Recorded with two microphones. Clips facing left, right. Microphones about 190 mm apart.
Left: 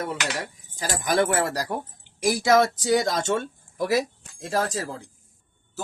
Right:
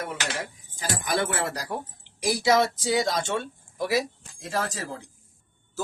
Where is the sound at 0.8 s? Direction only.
45° left (ahead or behind).